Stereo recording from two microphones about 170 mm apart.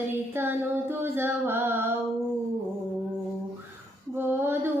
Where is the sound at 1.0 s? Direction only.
15° right (ahead or behind).